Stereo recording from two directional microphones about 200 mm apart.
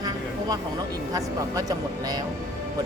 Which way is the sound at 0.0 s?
20° right (ahead or behind).